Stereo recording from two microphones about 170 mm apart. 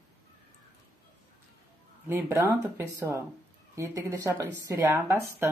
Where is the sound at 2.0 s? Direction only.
15° right (ahead or behind).